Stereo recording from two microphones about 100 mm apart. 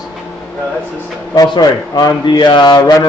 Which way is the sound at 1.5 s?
45° left (ahead or behind).